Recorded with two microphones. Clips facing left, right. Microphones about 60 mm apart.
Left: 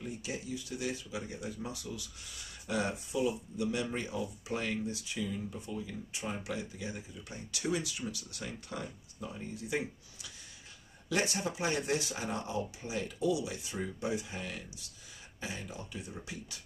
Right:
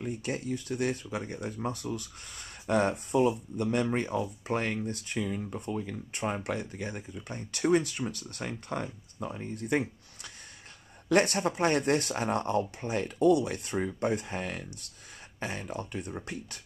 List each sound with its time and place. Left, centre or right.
0.0 s speech: right